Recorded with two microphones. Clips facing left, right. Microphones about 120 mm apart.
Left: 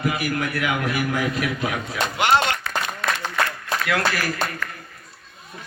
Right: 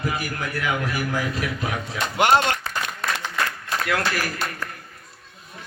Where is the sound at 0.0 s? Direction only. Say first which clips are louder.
Left 4 dB; 35° right (ahead or behind).